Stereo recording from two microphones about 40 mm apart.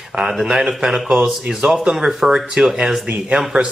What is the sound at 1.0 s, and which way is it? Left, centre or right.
Speech, right.